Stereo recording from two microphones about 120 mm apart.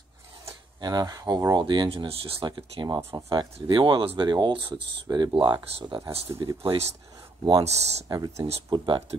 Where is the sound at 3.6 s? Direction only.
45° right (ahead or behind).